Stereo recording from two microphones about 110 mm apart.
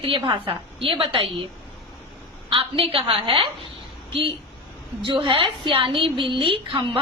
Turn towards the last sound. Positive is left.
turn(degrees=-50)  # may be behind; listen again after turning